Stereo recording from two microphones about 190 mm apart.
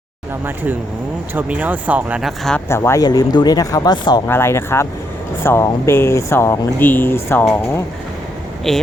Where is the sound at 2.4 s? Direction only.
10° left (ahead or behind).